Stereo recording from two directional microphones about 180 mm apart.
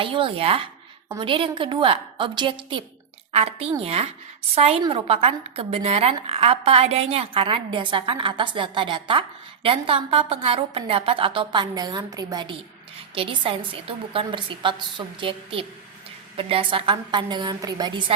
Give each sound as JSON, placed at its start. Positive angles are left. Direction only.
{"t": 0.0, "sound": "a woman's voice", "side_deg": -30}